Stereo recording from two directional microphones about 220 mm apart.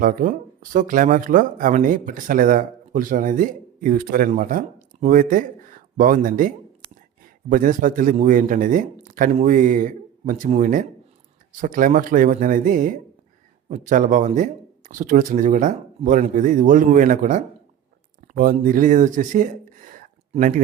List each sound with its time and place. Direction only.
0.0 s speech: 35° right (ahead or behind)
7.5 s speech: 35° right (ahead or behind)